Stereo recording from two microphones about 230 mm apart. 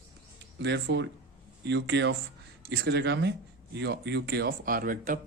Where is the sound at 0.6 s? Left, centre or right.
Right.